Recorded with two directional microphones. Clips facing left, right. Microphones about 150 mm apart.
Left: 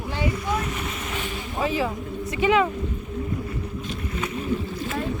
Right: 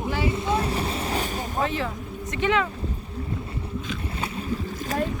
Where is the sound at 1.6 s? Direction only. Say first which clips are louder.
Left 3 dB; 10° left (ahead or behind).